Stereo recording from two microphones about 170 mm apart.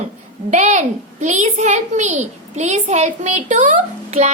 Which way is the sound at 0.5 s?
40° right (ahead or behind).